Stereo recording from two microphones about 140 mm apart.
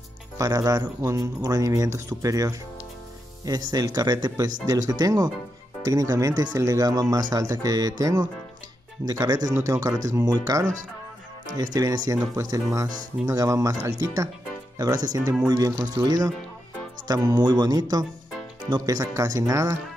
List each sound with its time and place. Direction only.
0.4 s speech: 25° right (ahead or behind)
15.4 s speech: 25° right (ahead or behind)